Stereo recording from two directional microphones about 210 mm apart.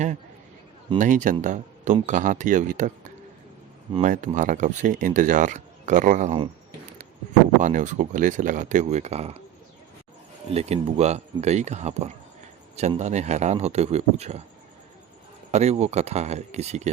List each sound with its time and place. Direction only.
0.9 s speech: 35° right (ahead or behind)
3.9 s speech: 35° right (ahead or behind)
7.6 s speech: 40° right (ahead or behind)
10.5 s speech: 30° right (ahead or behind)
15.5 s speech: 30° right (ahead or behind)